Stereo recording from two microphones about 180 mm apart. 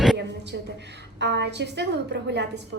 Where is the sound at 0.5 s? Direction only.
80° right.